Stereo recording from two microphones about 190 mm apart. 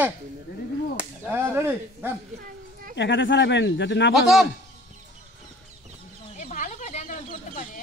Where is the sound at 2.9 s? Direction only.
70° left (ahead or behind).